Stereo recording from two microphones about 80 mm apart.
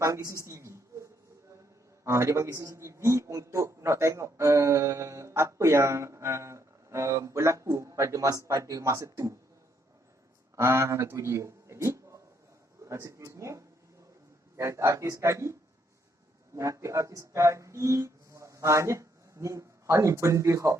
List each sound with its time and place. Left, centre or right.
0.0 s a sound: right
2.0 s a man's voice: right
10.5 s a man's voice: right
16.6 s speech: right